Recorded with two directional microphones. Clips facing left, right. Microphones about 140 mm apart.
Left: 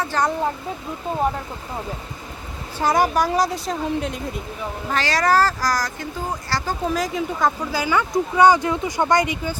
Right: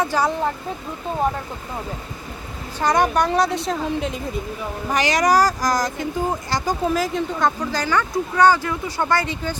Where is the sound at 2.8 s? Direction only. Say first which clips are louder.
Even; 5° left (ahead or behind).